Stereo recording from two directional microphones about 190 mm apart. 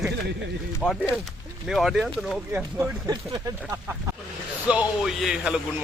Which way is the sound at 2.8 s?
15° right (ahead or behind).